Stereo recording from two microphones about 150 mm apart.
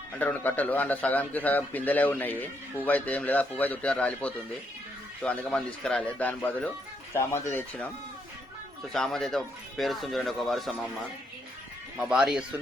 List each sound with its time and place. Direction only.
0.2 s a man's voice: 10° left (ahead or behind)
8.9 s speech: 5° left (ahead or behind)
11.9 s speech: 5° right (ahead or behind)